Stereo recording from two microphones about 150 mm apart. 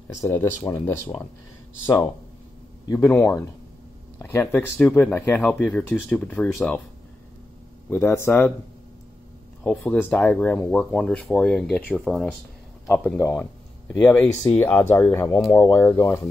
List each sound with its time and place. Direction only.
0.7 s speech: 25° left (ahead or behind)
3.0 s speech: 15° left (ahead or behind)
7.9 s speech: 15° left (ahead or behind)
9.6 s speech: 10° left (ahead or behind)